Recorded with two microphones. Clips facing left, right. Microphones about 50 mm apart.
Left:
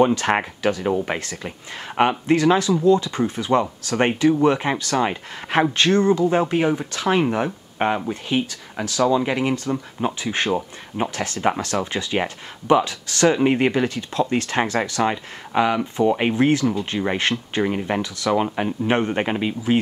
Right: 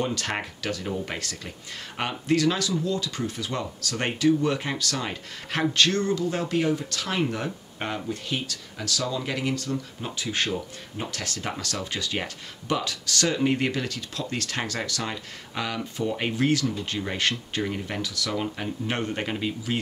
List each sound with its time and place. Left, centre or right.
0.0 s speech: left